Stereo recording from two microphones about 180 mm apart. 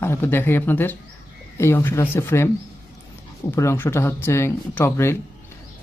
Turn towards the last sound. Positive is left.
turn(degrees=15)  # may be behind; listen again after turning